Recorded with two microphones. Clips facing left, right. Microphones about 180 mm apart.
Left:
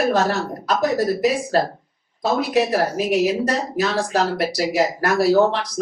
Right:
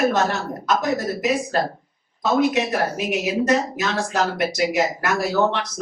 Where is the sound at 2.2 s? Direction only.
35° left (ahead or behind).